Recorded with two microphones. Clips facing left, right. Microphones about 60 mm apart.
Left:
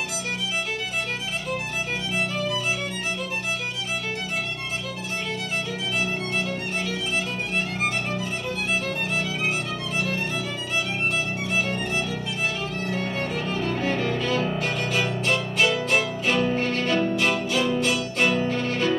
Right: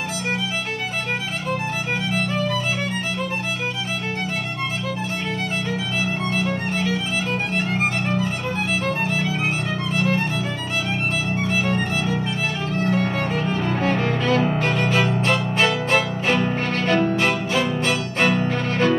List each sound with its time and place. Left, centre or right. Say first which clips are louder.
11.6 s violin: right 4 dB; right
12.8 s music: right 7 dB; right